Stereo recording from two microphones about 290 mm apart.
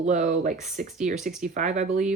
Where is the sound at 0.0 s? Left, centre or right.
Right.